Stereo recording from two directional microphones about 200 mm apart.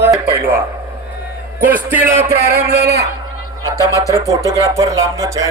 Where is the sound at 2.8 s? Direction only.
55° right (ahead or behind).